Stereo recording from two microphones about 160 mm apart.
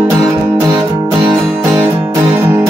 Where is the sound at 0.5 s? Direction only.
15° right (ahead or behind).